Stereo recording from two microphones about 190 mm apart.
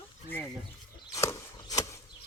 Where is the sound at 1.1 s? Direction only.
15° left (ahead or behind).